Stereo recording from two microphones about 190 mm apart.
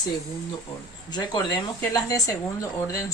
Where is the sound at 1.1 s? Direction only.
20° left (ahead or behind).